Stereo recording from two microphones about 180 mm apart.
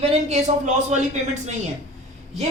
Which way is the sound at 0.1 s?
40° right (ahead or behind).